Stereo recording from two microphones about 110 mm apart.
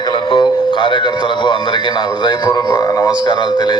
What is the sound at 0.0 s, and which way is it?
Music, 50° left (ahead or behind).